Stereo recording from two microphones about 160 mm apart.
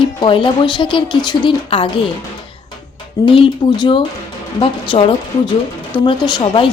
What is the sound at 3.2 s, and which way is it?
Speech, 30° left (ahead or behind).